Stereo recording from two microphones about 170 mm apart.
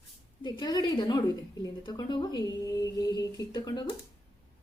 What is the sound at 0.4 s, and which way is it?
Speech, 25° left (ahead or behind).